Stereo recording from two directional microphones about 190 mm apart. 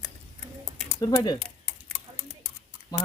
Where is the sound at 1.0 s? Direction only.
20° left (ahead or behind).